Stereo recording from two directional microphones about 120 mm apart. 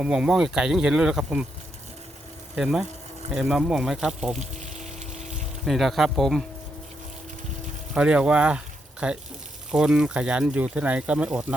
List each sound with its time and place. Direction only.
0.0 s speech: 5° right (ahead or behind)
2.6 s speech: 5° right (ahead or behind)
4.4 s a sound: 80° right
5.6 s speech: centre (ahead or behind)
7.9 s speech: 10° right (ahead or behind)